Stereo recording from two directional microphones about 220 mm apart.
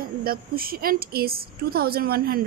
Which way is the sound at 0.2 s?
40° right (ahead or behind).